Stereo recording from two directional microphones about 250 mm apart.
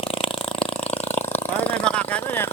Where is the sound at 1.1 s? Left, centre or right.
Centre.